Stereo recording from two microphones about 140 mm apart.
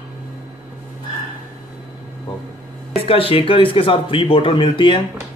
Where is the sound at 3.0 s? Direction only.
40° left (ahead or behind).